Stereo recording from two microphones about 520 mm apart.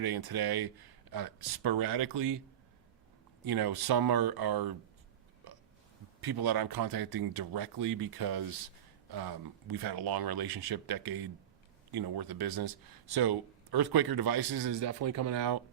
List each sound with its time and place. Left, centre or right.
0.0 s speech: right
3.4 s speech: right
5.4 s burping: right
6.2 s speech: right
15.0 s speech: right
15.3 s speech: right